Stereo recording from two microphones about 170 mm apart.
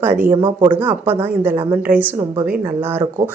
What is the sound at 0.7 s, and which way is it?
Speech, 10° right (ahead or behind).